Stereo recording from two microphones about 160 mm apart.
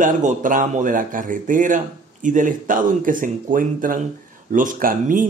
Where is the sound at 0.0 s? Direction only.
50° right (ahead or behind).